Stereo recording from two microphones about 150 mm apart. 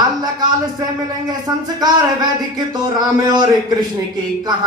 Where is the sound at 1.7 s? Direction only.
25° right (ahead or behind).